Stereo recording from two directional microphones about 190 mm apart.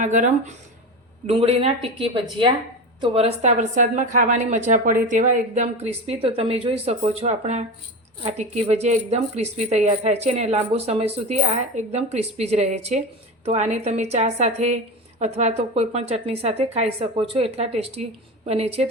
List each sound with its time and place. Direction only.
0.0 s a woman's voice: 40° right (ahead or behind)
1.3 s a woman's voice: 30° right (ahead or behind)